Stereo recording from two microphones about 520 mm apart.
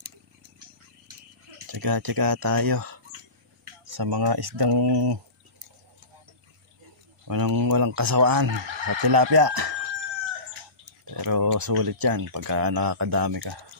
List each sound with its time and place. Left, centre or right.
1.7 s speech: right
7.2 s speech: right
11.1 s speech: right